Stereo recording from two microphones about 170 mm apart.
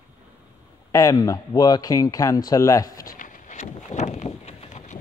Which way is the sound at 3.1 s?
55° left (ahead or behind).